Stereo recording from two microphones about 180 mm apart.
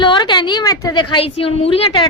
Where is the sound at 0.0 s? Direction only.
25° left (ahead or behind).